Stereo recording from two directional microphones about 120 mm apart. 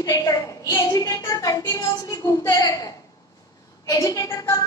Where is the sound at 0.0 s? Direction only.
30° left (ahead or behind).